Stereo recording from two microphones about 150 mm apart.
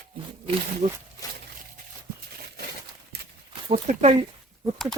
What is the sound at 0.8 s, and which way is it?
Speech, 50° right (ahead or behind).